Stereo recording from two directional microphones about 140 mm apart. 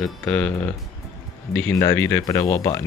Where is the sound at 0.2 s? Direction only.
10° left (ahead or behind).